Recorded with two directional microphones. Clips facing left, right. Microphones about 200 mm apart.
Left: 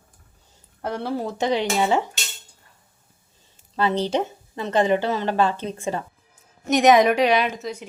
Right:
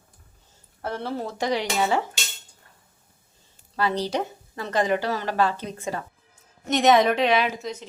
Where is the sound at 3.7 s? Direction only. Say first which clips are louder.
Left 3 dB; 25° left (ahead or behind).